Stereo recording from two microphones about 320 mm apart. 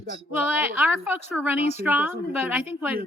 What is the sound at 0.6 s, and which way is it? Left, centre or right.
A woman's voice, centre.